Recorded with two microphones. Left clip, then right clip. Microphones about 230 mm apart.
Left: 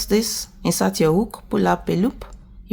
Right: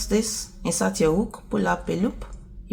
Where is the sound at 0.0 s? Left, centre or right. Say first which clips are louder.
Left 4 dB; left.